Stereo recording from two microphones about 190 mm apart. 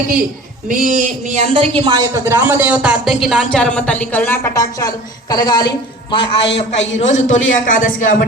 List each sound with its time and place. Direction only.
0.7 s a man's voice: 40° right (ahead or behind); by 8.1 s 45° left (ahead or behind)